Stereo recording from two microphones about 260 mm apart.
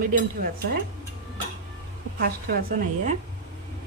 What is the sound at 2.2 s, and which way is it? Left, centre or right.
Speech, right.